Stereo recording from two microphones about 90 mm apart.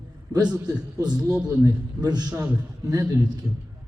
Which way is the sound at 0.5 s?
45° right (ahead or behind).